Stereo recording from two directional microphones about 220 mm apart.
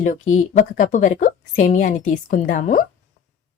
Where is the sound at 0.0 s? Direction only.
35° left (ahead or behind).